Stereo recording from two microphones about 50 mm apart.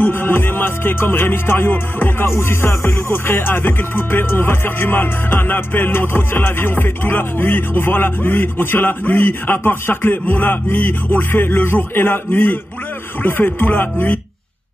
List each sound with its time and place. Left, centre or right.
0.0 s music: left